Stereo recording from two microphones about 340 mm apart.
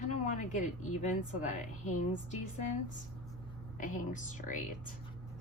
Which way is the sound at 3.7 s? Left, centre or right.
Left.